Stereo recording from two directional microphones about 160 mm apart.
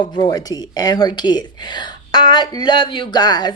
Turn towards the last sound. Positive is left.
turn(degrees=25)  # may be behind; listen again after turning